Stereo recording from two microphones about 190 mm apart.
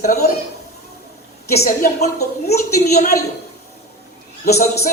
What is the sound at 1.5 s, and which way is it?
A woman's voice, 50° left (ahead or behind).